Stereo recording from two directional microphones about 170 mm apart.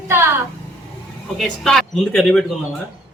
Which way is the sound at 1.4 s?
Centre (ahead or behind).